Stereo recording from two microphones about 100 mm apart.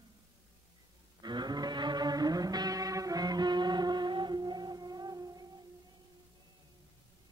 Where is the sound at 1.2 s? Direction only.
45° right (ahead or behind).